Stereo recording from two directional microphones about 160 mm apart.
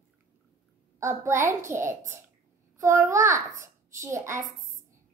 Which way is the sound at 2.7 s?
20° right (ahead or behind).